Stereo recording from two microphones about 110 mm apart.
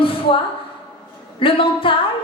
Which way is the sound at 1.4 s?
50° left (ahead or behind).